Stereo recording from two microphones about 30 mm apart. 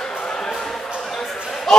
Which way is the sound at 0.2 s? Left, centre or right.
Centre.